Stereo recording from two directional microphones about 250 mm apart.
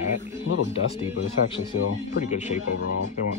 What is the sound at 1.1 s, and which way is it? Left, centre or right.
Speech, left.